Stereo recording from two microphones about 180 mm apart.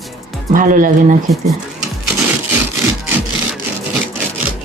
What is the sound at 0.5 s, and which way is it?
Speech, 45° right (ahead or behind).